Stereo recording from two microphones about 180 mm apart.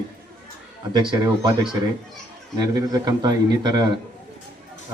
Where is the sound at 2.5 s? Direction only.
20° right (ahead or behind).